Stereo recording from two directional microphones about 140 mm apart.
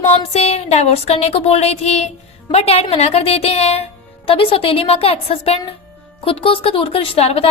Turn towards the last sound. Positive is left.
turn(degrees=45)  # may be behind; listen again after turning